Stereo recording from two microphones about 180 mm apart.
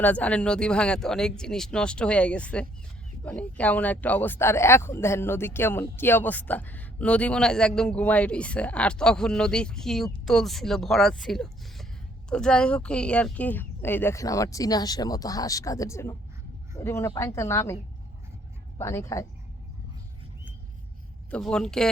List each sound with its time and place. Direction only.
0.0 s speech: 10° left (ahead or behind)
18.8 s speech: 15° left (ahead or behind)
21.2 s speech: 5° left (ahead or behind)